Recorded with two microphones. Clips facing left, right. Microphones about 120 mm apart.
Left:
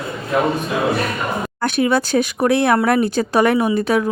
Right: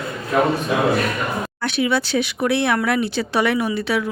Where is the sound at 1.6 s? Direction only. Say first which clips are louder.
Left 4 dB; 45° left (ahead or behind).